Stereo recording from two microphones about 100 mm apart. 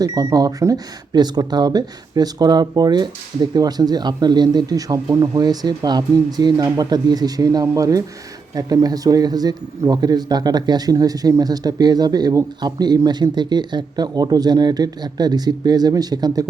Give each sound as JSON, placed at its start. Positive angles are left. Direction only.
{"t": 0.0, "sound": "speech", "side_deg": -35}
{"t": 5.4, "sound": "speech", "side_deg": -45}